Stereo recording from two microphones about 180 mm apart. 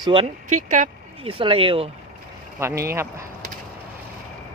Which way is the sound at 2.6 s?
15° right (ahead or behind).